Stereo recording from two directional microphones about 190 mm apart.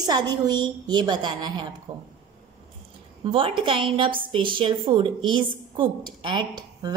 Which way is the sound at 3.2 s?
30° right (ahead or behind).